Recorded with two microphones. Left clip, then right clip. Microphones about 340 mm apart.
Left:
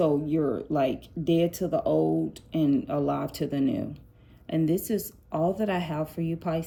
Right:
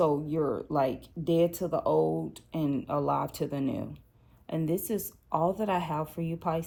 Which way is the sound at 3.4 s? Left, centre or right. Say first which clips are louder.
Left 4 dB; right.